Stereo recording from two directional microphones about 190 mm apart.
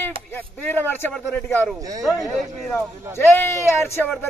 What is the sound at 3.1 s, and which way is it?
Speech, 10° left (ahead or behind).